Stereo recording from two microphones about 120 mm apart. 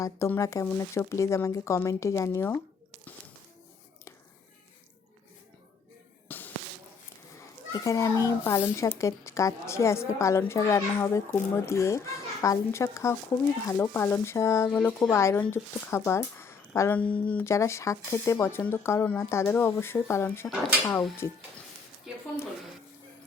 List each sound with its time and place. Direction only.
0.0 s a woman's voice: 25° left (ahead or behind)
6.2 s a sound: 15° left (ahead or behind)
7.7 s a woman's voice: 30° left (ahead or behind)
14.7 s speech: 5° left (ahead or behind)
15.1 s a woman's voice: 25° left (ahead or behind)
17.0 s speech: 10° left (ahead or behind)
17.4 s a woman's voice: 25° left (ahead or behind)